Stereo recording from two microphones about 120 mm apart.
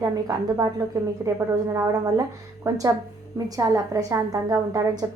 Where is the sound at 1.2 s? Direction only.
15° right (ahead or behind).